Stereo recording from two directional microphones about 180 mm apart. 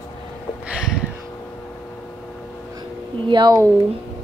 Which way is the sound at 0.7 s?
5° right (ahead or behind).